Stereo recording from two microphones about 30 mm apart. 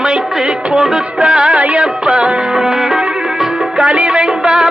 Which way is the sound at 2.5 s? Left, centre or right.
Centre.